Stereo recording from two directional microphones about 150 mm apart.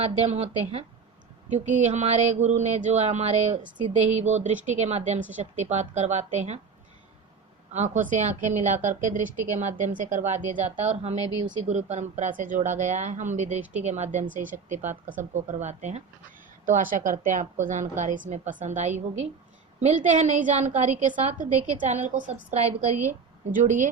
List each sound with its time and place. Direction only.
0.2 s a woman's voice: 45° right (ahead or behind)
7.7 s a woman's voice: 55° right (ahead or behind)
16.6 s a woman's voice: 65° right (ahead or behind)